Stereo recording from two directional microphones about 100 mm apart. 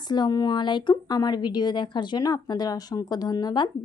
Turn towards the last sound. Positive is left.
turn(degrees=40)  # may be behind; listen again after turning